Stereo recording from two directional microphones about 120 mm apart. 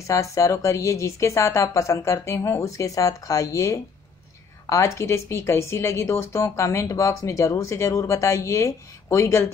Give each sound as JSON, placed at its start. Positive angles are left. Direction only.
{"t": 0.0, "sound": "speech", "side_deg": 25}